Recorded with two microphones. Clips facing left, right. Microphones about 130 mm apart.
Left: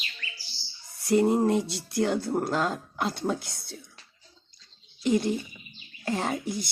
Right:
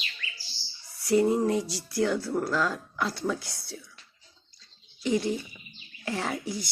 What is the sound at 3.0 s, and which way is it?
Speech, 20° left (ahead or behind).